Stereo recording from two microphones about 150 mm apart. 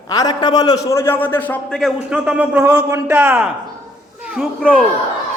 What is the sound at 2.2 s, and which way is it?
A man's voice, 10° right (ahead or behind).